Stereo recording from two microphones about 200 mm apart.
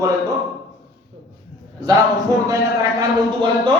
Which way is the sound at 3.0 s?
20° right (ahead or behind).